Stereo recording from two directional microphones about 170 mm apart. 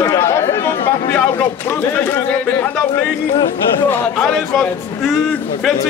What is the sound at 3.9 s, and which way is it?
A man's voice, 5° left (ahead or behind).